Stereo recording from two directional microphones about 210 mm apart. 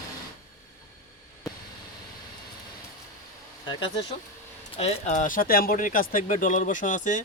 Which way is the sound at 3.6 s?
25° left (ahead or behind).